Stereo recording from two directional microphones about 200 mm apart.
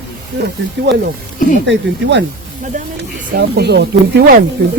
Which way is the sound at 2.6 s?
40° right (ahead or behind).